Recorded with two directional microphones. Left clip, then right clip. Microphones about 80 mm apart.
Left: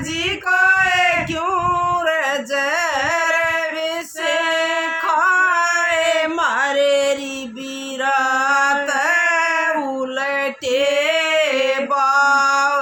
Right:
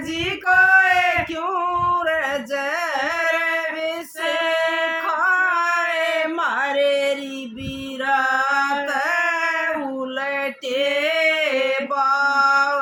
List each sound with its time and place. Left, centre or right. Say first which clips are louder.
0.4 s female singing: right 1 dB; right
1.5 s singing: left 3 dB; left
4.2 s female singing: left 2 dB; right
5.0 s music: left 5 dB; left
8.0 s a sound: left 2 dB; left
10.2 s female singing: left 3 dB; left
11.9 s male singing: left 6 dB; left